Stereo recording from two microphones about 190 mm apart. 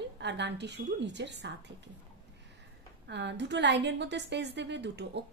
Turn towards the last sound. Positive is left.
turn(degrees=-65)  # may be behind; listen again after turning